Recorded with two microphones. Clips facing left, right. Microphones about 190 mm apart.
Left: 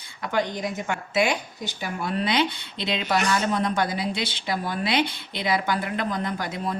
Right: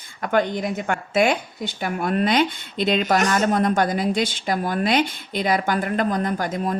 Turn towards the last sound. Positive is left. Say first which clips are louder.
# right 5 dB
turn(degrees=-45)  # may be behind; listen again after turning